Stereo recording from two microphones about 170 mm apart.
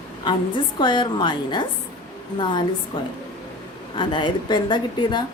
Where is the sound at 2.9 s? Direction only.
25° left (ahead or behind).